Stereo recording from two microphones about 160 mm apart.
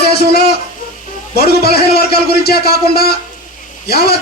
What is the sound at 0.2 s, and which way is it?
A man's voice, 80° left.